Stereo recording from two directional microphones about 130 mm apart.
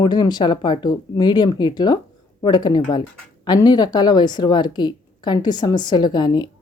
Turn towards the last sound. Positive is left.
turn(degrees=35)  # may be behind; listen again after turning